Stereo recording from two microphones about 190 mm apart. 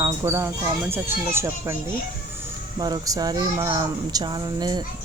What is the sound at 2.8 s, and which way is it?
Speech, 20° right (ahead or behind).